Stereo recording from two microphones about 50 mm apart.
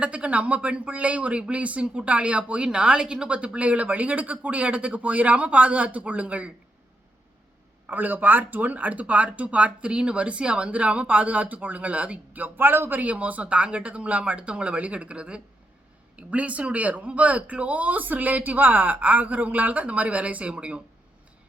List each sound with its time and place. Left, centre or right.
0.0 s speech: right
7.9 s speech: right
12.5 s a man's voice: right
13.0 s speech: right